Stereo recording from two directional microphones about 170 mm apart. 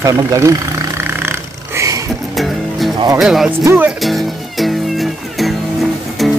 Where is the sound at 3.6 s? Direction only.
10° right (ahead or behind).